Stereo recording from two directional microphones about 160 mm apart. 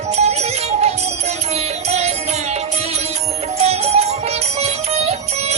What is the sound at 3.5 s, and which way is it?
Music, 40° right (ahead or behind).